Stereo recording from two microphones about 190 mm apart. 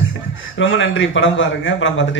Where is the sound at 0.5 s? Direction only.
90° left.